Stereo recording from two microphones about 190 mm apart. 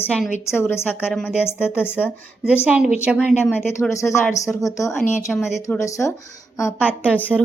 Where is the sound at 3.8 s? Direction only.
15° left (ahead or behind).